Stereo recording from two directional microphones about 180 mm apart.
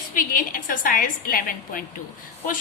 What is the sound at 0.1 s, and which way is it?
A woman's voice, 50° left (ahead or behind).